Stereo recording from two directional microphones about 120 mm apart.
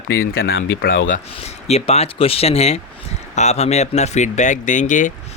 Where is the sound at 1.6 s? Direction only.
60° left (ahead or behind).